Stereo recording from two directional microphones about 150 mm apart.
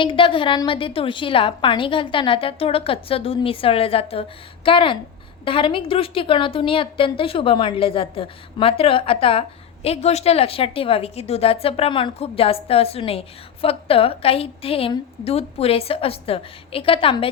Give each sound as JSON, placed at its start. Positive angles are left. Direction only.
{"t": 0.0, "sound": "a woman's voice", "side_deg": 35}